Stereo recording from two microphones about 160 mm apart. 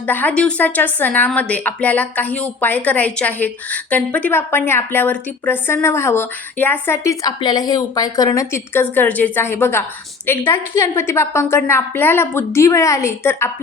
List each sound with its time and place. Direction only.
0.0 s a woman's voice: 10° left (ahead or behind)